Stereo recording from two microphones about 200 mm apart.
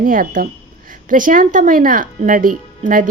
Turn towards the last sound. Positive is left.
turn(degrees=-40)  # may be behind; listen again after turning